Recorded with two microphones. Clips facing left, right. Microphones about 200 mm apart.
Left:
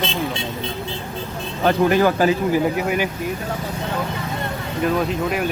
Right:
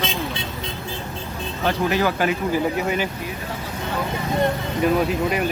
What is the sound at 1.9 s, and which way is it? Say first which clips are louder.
Speech: left 4 dB; 45° left (ahead or behind).